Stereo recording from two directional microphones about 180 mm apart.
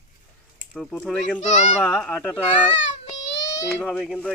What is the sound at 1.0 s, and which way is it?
Speech, 5° left (ahead or behind).